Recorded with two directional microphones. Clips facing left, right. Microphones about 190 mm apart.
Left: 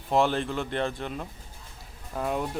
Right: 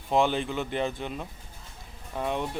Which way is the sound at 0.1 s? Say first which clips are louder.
Even; centre (ahead or behind).